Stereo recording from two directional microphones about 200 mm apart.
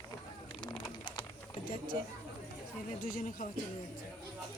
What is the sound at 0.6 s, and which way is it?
Pigeon, 25° left (ahead or behind).